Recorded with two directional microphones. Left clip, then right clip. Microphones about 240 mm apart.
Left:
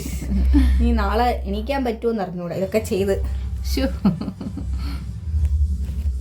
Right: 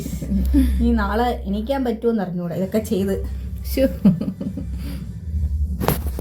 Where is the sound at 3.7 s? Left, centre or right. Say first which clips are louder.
Right 5 dB; centre.